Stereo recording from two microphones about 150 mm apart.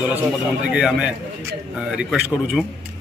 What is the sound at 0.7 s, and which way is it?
A man's voice, 5° right (ahead or behind).